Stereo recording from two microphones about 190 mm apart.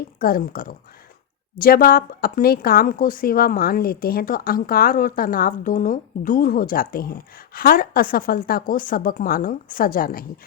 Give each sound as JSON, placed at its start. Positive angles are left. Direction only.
{"t": 0.2, "sound": "a woman's voice", "side_deg": 50}